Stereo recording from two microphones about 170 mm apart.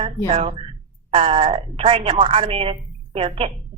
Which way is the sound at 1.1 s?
35° right (ahead or behind).